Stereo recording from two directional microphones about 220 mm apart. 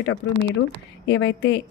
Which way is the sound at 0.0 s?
60° left (ahead or behind).